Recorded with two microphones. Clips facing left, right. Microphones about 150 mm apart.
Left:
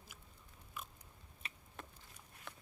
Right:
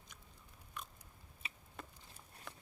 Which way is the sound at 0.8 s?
5° left (ahead or behind).